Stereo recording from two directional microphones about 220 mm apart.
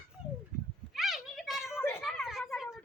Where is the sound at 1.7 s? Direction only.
10° left (ahead or behind).